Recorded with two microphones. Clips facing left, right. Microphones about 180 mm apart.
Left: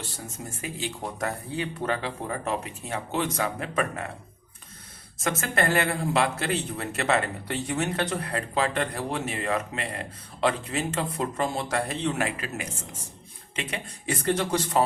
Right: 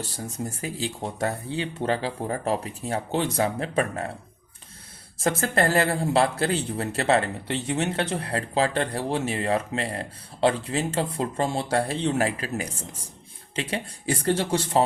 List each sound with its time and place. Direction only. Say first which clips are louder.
0.0 s a man's voice: right 6 dB; 35° right (ahead or behind)
5.2 s a man's voice: right 3 dB; 35° right (ahead or behind)